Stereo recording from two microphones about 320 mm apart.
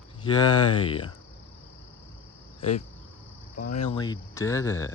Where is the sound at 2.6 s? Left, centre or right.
Left.